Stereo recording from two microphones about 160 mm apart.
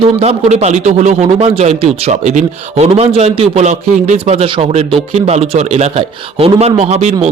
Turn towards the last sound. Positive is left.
turn(degrees=-45)  # may be behind; listen again after turning